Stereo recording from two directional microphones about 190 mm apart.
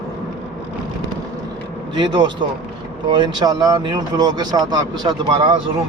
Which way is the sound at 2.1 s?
25° right (ahead or behind).